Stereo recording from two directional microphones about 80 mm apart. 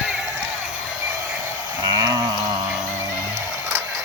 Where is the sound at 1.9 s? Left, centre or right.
Right.